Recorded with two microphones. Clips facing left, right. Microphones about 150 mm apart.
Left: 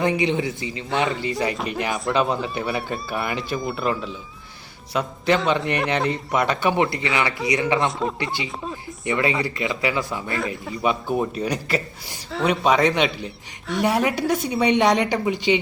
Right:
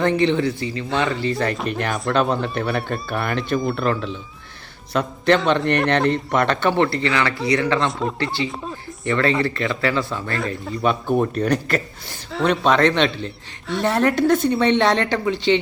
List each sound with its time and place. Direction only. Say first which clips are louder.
0.0 s a man's voice: right 3 dB; 10° left (ahead or behind)
1.5 s a man's voice: right 2 dB; 5° left (ahead or behind)
7.9 s speech: right 1 dB; centre (ahead or behind)
8.2 s a man's voice: right 3 dB; 15° left (ahead or behind)
10.7 s a man's voice: right 3 dB; centre (ahead or behind)